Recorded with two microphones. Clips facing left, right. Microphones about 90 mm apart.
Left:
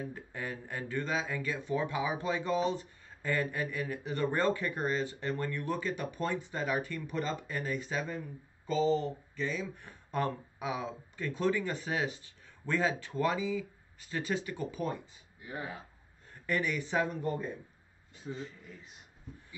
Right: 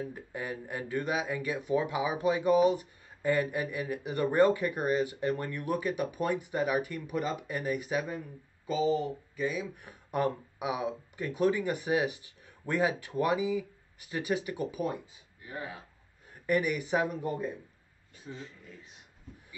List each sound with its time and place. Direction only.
0.1 s speech: 15° right (ahead or behind)
16.4 s speech: 15° right (ahead or behind)
18.3 s speech: 15° left (ahead or behind)